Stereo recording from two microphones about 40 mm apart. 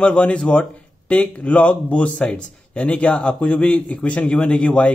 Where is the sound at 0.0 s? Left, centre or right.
Left.